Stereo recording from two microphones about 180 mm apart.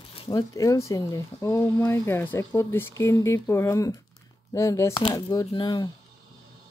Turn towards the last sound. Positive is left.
turn(degrees=25)  # may be behind; listen again after turning